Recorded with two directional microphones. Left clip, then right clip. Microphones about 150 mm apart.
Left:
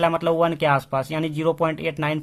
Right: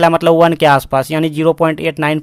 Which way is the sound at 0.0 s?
40° right (ahead or behind).